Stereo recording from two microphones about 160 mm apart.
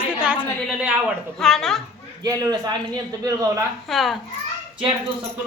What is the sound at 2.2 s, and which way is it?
A man's voice, 25° right (ahead or behind).